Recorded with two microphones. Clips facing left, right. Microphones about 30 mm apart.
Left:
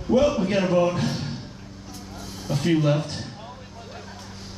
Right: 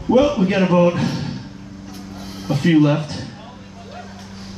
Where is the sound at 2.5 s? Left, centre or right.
Right.